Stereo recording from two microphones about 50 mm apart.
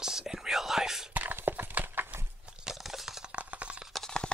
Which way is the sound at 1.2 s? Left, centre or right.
Right.